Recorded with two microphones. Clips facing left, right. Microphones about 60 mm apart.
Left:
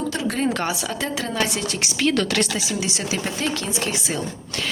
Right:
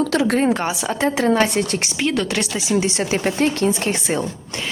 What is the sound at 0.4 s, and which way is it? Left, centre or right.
Speech, centre.